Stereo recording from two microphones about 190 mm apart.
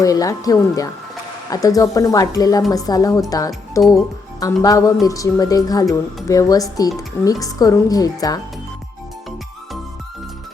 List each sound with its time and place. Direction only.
0.0 s speech: 20° left (ahead or behind)